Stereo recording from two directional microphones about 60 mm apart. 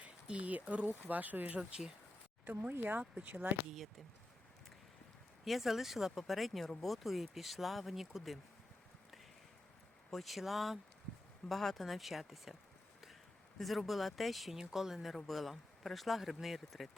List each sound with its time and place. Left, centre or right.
0.0 s speech: right
5.5 s speech: centre
10.1 s speech: centre
13.6 s speech: centre